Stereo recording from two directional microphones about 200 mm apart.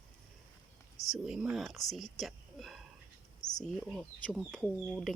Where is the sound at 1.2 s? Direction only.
5° right (ahead or behind).